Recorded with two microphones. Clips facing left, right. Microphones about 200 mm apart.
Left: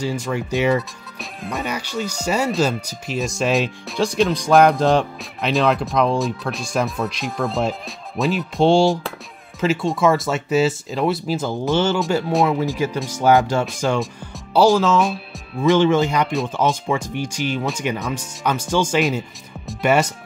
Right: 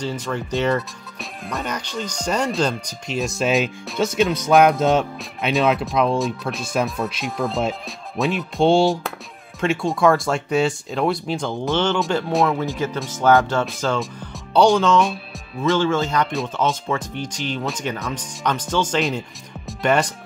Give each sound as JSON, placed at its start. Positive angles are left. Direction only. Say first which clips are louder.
{"t": 0.0, "sound": "speech", "louder": "left 2 dB", "side_deg": 10}
{"t": 1.4, "sound": "speech", "louder": "left 2 dB", "side_deg": 0}
{"t": 15.7, "sound": "speech", "louder": "left 4 dB", "side_deg": 15}